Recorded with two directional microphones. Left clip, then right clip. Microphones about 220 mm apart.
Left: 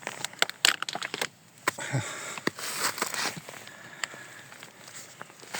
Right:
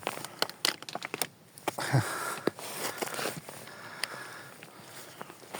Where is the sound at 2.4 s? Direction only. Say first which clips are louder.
Left 3 dB; 45° left (ahead or behind).